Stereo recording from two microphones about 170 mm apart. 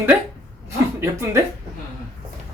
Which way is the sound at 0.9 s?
15° right (ahead or behind).